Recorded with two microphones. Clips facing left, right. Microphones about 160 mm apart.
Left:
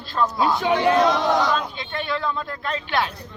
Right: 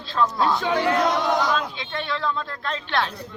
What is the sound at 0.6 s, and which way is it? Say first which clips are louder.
Speech: left 3 dB; 20° left (ahead or behind).